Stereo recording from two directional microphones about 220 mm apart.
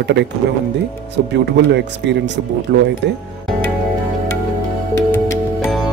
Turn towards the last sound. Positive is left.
turn(degrees=10)  # may be behind; listen again after turning